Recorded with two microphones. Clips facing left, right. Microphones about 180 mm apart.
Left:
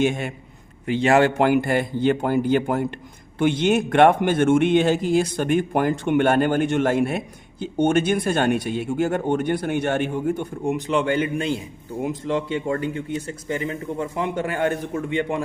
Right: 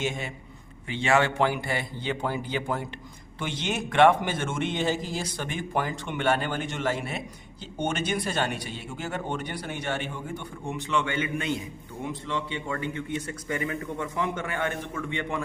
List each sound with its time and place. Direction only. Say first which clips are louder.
0.0 s a man's voice: left 9 dB; 55° left (ahead or behind)
0.9 s a man's voice: left 7 dB; 40° left (ahead or behind)